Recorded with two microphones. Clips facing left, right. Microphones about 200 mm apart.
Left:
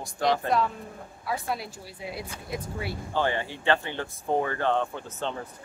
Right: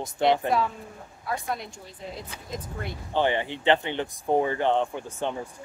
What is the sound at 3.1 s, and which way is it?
Speech, 20° right (ahead or behind).